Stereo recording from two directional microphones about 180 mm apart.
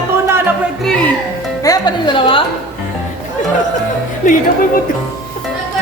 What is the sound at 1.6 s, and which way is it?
Speech, 20° left (ahead or behind).